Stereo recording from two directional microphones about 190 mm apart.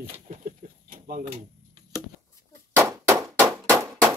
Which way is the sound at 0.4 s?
45° right (ahead or behind).